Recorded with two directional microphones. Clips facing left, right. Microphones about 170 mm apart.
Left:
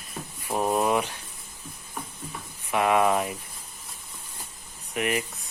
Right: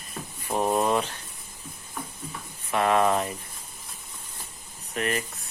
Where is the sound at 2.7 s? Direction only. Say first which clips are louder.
Even; 10° left (ahead or behind).